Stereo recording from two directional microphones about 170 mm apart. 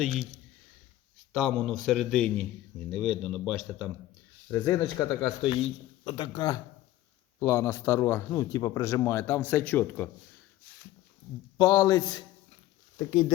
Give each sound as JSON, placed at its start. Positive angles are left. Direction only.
{"t": 0.0, "sound": "a man's voice", "side_deg": 0}
{"t": 1.3, "sound": "a man's voice", "side_deg": 0}
{"t": 4.5, "sound": "a man's voice", "side_deg": 15}
{"t": 11.5, "sound": "speech", "side_deg": 20}